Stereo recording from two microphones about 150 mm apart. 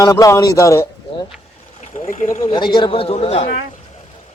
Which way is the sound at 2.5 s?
30° left (ahead or behind).